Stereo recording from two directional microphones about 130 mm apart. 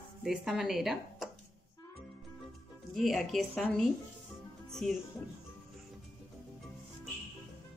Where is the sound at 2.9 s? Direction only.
Centre (ahead or behind).